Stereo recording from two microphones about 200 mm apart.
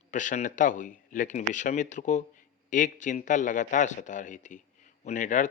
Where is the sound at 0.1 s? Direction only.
40° left (ahead or behind).